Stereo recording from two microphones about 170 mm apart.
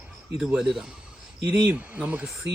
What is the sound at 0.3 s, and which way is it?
Speech, 5° right (ahead or behind).